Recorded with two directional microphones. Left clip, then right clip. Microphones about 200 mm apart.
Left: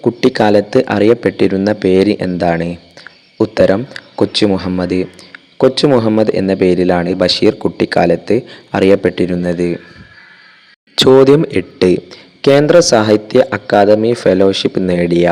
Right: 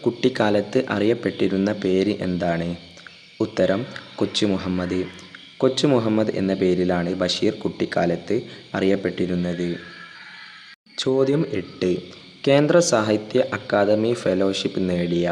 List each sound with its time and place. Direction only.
0.0 s a man's voice: 30° left (ahead or behind)
10.9 s a man's voice: 40° left (ahead or behind)